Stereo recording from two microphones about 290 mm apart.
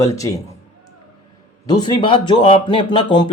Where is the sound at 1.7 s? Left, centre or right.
Centre.